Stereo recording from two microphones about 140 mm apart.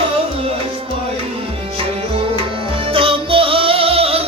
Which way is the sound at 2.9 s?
40° right (ahead or behind).